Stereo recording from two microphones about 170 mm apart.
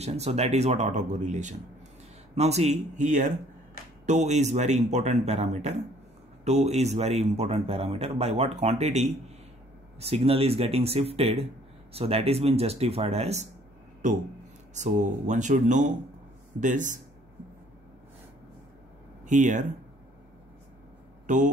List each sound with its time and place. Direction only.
0.0 s speech: 40° right (ahead or behind)
19.2 s speech: 45° right (ahead or behind)
21.3 s speech: 50° right (ahead or behind)